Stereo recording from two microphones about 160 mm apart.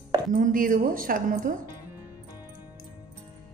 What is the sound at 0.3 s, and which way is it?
A woman's voice, 60° right (ahead or behind).